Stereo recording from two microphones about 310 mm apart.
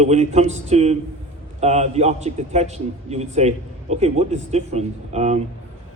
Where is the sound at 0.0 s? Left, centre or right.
Right.